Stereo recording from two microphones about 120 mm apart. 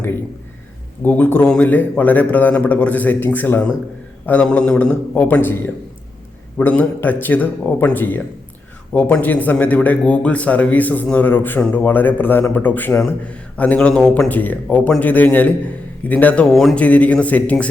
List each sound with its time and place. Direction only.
1.0 s speech: 15° left (ahead or behind)
16.5 s speech: centre (ahead or behind)
16.7 s speech: 10° left (ahead or behind)